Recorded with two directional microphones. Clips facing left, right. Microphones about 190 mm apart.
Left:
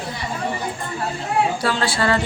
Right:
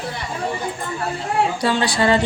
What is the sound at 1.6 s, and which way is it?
Speech, 15° right (ahead or behind).